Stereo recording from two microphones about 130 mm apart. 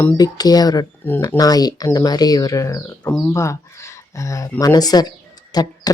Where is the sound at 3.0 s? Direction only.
5° left (ahead or behind).